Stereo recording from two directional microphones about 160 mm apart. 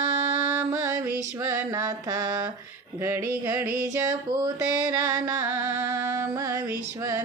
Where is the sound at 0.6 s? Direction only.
15° right (ahead or behind).